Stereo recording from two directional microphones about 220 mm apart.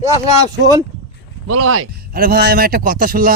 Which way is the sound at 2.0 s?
40° right (ahead or behind).